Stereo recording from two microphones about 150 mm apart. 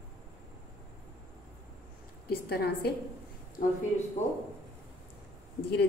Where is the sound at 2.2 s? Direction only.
90° left.